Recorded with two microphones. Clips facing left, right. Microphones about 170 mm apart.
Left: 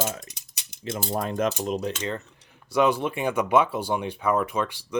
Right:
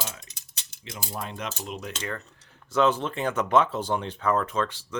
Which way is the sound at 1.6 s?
35° left (ahead or behind).